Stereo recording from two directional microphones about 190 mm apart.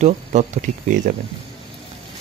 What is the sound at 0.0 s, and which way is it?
Speech, 40° right (ahead or behind).